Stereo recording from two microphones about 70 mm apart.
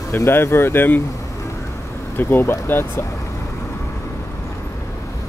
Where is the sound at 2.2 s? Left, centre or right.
Left.